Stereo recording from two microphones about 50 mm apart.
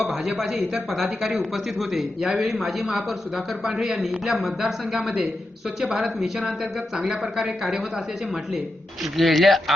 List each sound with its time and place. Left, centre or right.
0.1 s a man's voice: centre
9.1 s speech: centre